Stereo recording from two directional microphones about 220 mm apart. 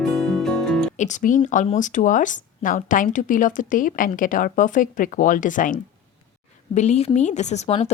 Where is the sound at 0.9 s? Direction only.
35° left (ahead or behind).